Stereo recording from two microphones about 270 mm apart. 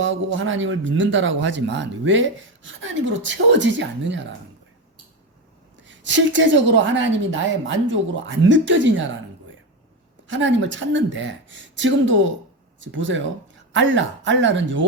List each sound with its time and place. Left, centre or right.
0.0 s speech: right
5.8 s speech: right
10.2 s speech: right